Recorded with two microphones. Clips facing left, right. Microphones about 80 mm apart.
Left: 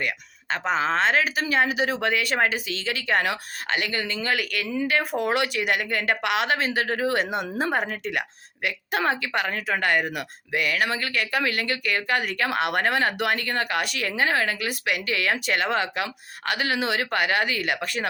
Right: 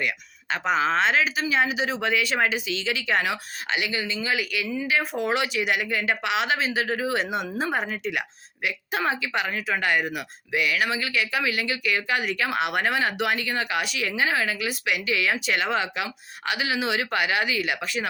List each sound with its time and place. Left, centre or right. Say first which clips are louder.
0.5 s speech: right 1 dB; left